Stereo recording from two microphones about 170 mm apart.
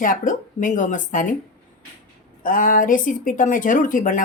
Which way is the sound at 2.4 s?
50° left (ahead or behind).